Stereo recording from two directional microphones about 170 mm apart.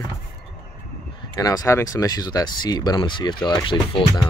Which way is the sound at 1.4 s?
20° left (ahead or behind).